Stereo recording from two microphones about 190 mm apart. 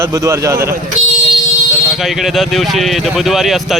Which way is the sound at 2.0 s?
Centre (ahead or behind).